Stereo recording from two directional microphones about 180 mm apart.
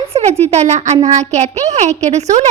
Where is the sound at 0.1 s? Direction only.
35° right (ahead or behind).